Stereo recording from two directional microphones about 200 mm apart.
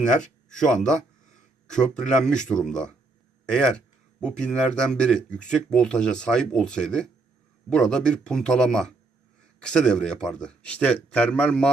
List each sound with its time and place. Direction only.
0.0 s speech: 5° left (ahead or behind)